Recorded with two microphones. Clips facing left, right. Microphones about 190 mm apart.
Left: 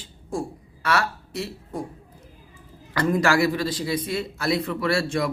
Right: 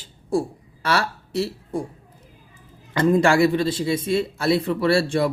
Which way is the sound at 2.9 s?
25° right (ahead or behind).